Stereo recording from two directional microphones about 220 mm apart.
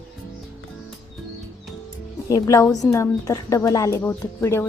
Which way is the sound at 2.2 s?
15° left (ahead or behind).